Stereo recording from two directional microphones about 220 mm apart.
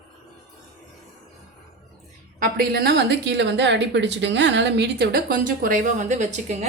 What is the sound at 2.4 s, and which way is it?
A woman's voice, 45° right (ahead or behind).